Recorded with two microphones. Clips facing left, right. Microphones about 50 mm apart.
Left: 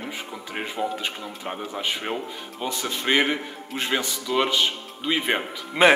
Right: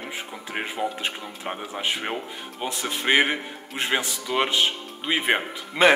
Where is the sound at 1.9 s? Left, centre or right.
Centre.